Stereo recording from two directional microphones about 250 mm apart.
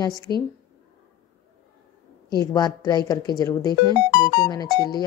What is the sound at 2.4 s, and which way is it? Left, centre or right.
Speech, centre.